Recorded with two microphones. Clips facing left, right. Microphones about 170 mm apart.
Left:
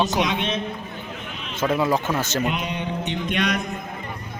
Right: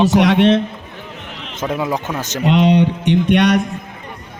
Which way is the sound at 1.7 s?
15° right (ahead or behind).